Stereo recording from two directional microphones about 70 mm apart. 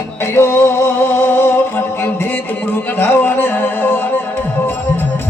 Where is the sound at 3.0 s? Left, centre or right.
Left.